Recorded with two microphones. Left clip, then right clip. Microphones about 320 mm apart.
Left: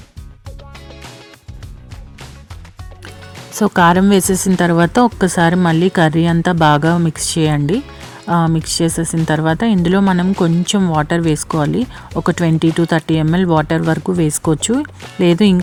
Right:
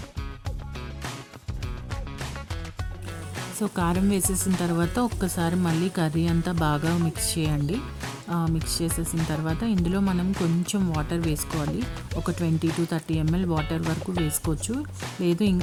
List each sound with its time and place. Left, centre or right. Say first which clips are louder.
3.6 s speech: left 16 dB; right